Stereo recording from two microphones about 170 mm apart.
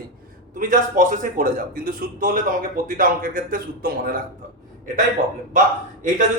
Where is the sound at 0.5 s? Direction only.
50° right (ahead or behind).